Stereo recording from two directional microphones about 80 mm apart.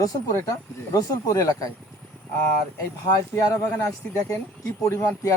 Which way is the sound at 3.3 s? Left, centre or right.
Left.